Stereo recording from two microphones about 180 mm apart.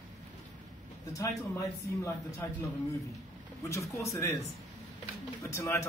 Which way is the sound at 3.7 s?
15° left (ahead or behind).